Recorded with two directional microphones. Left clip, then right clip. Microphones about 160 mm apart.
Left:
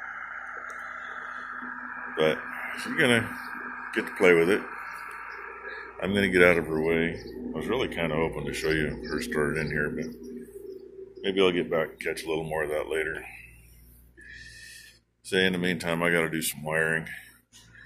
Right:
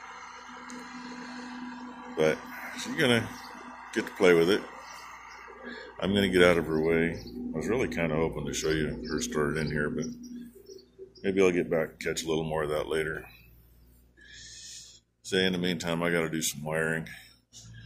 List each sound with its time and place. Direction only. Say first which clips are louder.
2.1 s speech: left 1 dB; 20° right (ahead or behind)
5.7 s speech: even; 15° right (ahead or behind)
11.1 s speech: left 1 dB; 25° right (ahead or behind)
15.2 s speech: left 3 dB; 10° right (ahead or behind)